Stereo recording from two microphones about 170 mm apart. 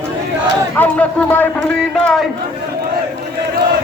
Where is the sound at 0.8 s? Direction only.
10° left (ahead or behind).